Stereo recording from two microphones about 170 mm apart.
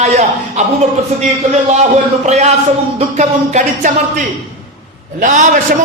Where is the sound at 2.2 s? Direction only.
45° right (ahead or behind).